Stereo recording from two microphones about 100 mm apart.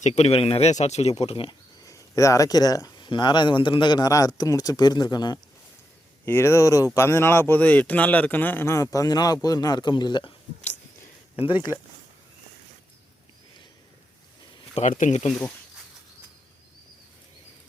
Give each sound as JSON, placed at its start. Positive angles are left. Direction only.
{"t": 0.1, "sound": "speech", "side_deg": 85}
{"t": 1.5, "sound": "a sound", "side_deg": 35}
{"t": 3.1, "sound": "a man's voice", "side_deg": 50}
{"t": 6.2, "sound": "a man's voice", "side_deg": 25}
{"t": 14.8, "sound": "speech", "side_deg": 90}